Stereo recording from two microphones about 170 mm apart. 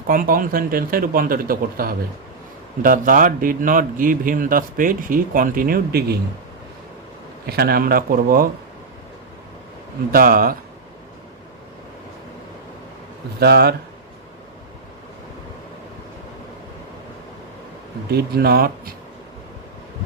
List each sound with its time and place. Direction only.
0.1 s a man's voice: 55° right (ahead or behind)
7.4 s speech: 65° right (ahead or behind)
10.1 s speech: 60° right (ahead or behind)
13.4 s speech: 70° right (ahead or behind)
18.1 s speech: 65° right (ahead or behind)